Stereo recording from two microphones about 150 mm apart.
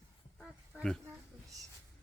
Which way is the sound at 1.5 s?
20° right (ahead or behind).